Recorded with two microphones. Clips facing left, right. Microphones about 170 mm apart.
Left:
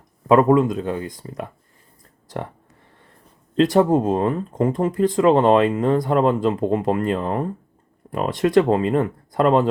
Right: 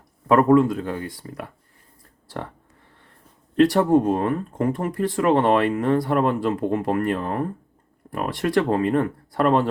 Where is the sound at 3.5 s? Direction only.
20° left (ahead or behind).